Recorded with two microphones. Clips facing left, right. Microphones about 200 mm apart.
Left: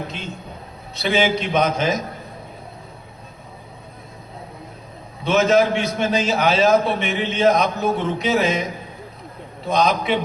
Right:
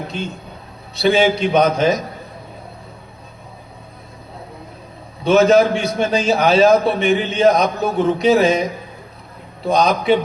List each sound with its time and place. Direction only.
0.9 s a man's voice: 35° right (ahead or behind)
5.2 s a man's voice: 35° right (ahead or behind)
9.6 s a man's voice: 35° right (ahead or behind)